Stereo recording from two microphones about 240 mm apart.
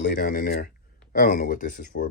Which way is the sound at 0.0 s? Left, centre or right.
Left.